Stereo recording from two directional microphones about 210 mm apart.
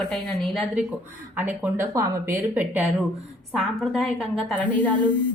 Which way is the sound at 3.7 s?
Centre (ahead or behind).